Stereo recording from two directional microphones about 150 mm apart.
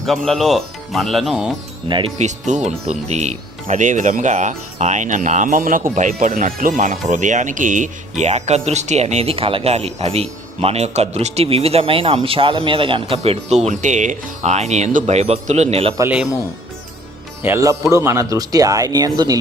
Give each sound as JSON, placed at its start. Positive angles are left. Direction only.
{"t": 0.0, "sound": "speech", "side_deg": 0}
{"t": 1.9, "sound": "speech", "side_deg": -35}
{"t": 2.5, "sound": "speech", "side_deg": -50}
{"t": 17.4, "sound": "speech", "side_deg": -20}